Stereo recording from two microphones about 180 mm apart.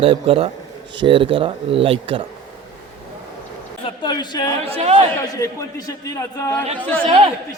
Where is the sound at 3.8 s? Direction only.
25° left (ahead or behind).